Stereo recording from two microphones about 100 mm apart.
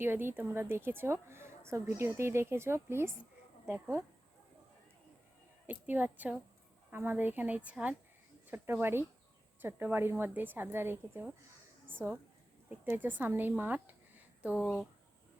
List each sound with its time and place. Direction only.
0.0 s a woman's voice: 20° right (ahead or behind)
5.6 s a woman's voice: 20° right (ahead or behind)